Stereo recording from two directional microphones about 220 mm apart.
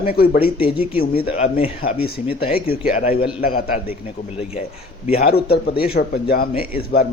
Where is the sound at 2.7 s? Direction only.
40° left (ahead or behind).